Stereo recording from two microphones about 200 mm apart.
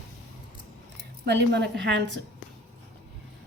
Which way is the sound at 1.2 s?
55° right (ahead or behind).